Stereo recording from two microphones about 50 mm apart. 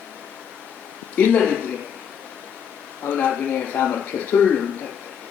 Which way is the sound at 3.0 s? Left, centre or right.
Left.